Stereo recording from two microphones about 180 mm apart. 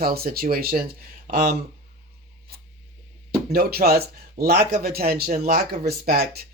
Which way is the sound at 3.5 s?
55° right (ahead or behind).